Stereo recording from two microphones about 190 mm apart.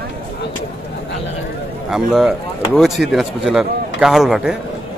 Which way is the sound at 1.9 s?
Centre (ahead or behind).